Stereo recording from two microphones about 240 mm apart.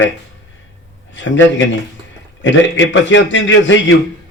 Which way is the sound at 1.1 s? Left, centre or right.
Left.